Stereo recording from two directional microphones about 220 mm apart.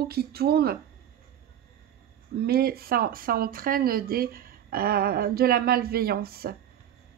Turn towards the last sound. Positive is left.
turn(degrees=-45)  # may be behind; listen again after turning